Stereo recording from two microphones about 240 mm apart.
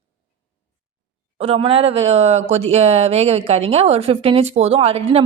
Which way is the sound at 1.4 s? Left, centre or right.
Right.